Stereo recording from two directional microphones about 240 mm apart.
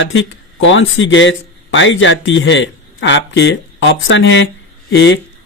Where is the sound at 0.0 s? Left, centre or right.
Left.